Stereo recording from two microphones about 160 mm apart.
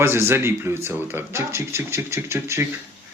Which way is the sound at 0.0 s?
15° right (ahead or behind).